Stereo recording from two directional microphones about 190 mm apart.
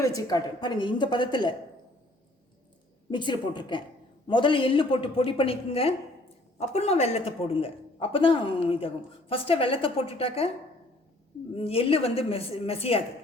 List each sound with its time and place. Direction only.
0.0 s speech: 20° left (ahead or behind)
3.1 s speech: 25° left (ahead or behind)
11.5 s a woman's voice: 30° left (ahead or behind)